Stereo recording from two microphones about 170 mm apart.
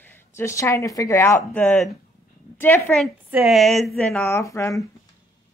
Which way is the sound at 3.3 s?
Centre (ahead or behind).